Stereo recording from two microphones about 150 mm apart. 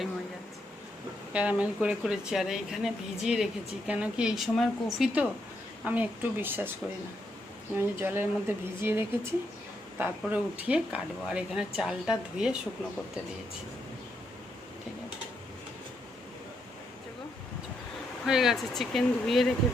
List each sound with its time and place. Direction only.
1.3 s speech: 10° right (ahead or behind)
7.8 s speech: 15° right (ahead or behind)
18.3 s speech: 5° right (ahead or behind)